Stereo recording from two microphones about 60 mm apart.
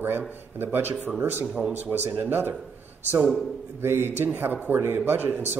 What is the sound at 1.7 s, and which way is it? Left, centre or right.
Speech, right.